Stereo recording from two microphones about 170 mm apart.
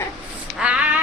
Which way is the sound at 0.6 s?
10° right (ahead or behind).